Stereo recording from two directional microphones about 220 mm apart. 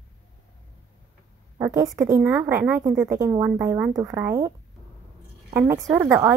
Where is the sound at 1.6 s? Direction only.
15° right (ahead or behind).